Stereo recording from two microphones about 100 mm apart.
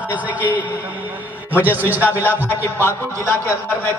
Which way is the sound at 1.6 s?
20° right (ahead or behind).